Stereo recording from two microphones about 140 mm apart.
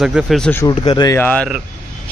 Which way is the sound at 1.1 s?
10° left (ahead or behind).